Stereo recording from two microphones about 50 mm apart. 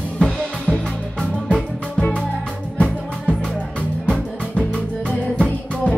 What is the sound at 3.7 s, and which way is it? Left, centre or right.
Music, left.